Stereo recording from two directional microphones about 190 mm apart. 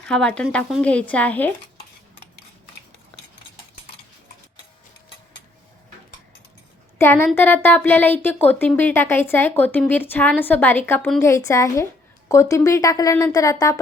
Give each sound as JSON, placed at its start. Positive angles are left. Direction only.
{"t": 0.0, "sound": "speech", "side_deg": 5}
{"t": 3.1, "sound": "a sound", "side_deg": 10}
{"t": 7.0, "sound": "speech", "side_deg": 10}